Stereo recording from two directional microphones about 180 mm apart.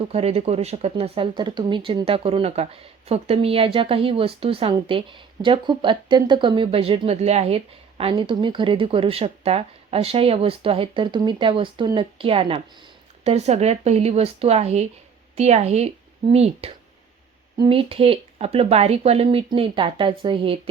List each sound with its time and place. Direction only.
0.1 s speech: 35° right (ahead or behind)